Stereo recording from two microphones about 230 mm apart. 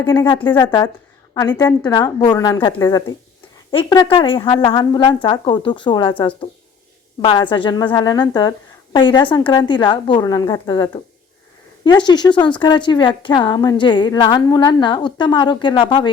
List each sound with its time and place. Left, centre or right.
0.0 s a woman's voice: centre